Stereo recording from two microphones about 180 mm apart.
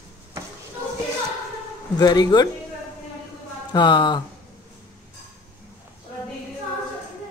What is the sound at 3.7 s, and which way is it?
Speech, 25° left (ahead or behind).